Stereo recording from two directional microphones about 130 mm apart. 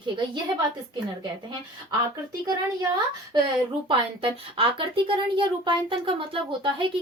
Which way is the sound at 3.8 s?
40° right (ahead or behind).